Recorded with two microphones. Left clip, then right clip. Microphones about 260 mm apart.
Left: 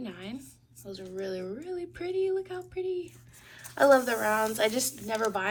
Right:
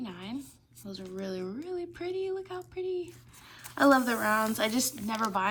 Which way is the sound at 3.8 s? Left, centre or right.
Right.